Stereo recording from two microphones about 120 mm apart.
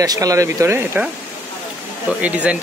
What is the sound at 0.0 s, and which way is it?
Speech, 30° right (ahead or behind).